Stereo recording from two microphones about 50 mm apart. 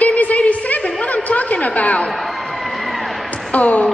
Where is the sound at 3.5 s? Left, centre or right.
Left.